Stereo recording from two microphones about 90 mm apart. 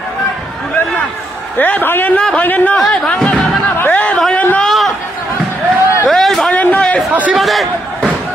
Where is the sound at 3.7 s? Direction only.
20° left (ahead or behind).